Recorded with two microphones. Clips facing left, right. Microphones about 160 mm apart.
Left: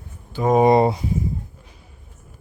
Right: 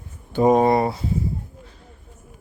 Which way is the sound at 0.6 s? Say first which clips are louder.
Left 3 dB; 20° left (ahead or behind).